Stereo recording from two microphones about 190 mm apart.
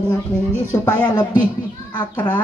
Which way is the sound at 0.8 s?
20° left (ahead or behind).